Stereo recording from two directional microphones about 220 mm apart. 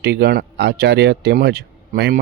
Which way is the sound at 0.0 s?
50° right (ahead or behind).